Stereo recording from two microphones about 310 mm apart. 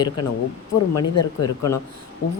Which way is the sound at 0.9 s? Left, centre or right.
Left.